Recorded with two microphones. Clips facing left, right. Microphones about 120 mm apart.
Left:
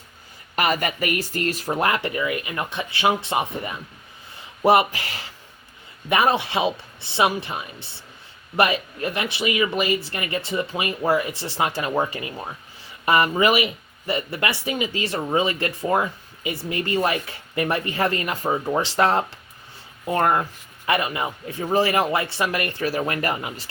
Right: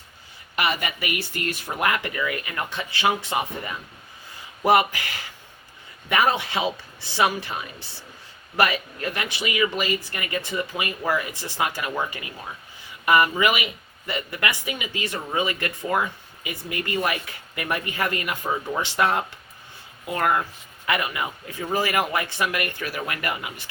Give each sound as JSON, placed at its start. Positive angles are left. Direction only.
{"t": 0.5, "sound": "speech", "side_deg": 45}